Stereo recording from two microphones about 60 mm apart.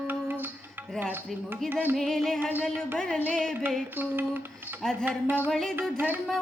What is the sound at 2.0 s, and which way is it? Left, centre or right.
Music, centre.